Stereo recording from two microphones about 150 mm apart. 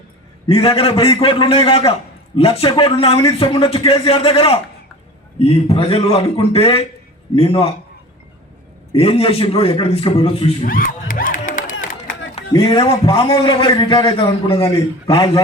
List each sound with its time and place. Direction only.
0.4 s a man's voice: 40° left (ahead or behind)
9.0 s a man's voice: 40° left (ahead or behind)
10.6 s music: 70° left (ahead or behind)
12.5 s a man's voice: 30° left (ahead or behind)
15.1 s a man's voice: 25° left (ahead or behind)